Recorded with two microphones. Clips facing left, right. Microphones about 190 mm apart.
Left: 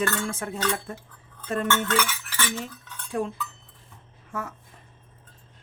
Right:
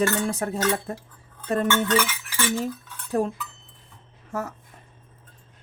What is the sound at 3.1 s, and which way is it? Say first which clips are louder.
Speech: right 4 dB; 40° right (ahead or behind).